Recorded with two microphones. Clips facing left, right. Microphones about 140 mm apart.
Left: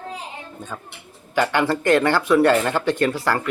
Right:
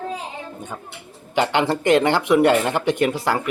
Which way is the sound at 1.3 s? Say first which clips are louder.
Even; 20° right (ahead or behind).